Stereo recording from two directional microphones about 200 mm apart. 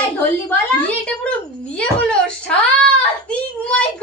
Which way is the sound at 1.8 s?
5° left (ahead or behind).